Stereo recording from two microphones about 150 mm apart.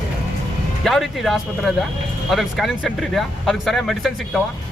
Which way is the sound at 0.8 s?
Centre (ahead or behind).